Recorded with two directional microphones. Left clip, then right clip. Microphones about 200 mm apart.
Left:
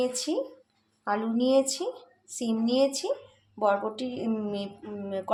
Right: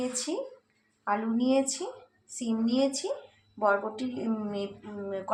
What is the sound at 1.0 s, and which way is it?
Speech, 30° left (ahead or behind).